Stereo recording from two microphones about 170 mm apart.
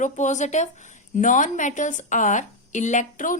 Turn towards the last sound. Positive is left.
turn(degrees=45)  # may be behind; listen again after turning